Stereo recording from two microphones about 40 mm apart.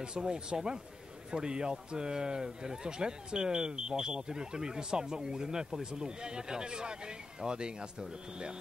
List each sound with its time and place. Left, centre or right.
0.0 s a man's voice: right